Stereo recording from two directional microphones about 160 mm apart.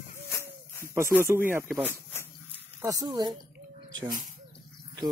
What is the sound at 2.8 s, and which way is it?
Speech, 25° right (ahead or behind).